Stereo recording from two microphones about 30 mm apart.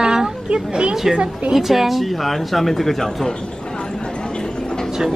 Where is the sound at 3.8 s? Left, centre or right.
Left.